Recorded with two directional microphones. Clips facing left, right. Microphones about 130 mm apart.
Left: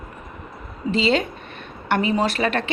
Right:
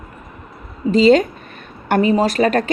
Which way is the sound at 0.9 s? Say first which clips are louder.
Right 9 dB; 45° right (ahead or behind).